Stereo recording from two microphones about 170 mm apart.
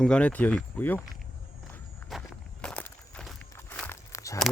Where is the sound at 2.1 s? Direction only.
Centre (ahead or behind); by 4.3 s 20° left (ahead or behind).